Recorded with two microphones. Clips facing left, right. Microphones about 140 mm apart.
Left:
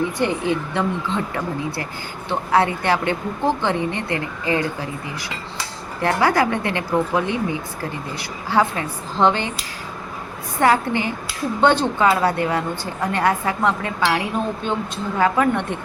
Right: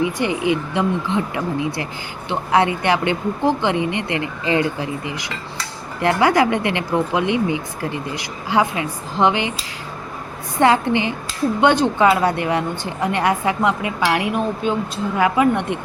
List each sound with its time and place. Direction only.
0.0 s a woman's voice: 15° right (ahead or behind)
10.6 s a woman's voice: 20° right (ahead or behind)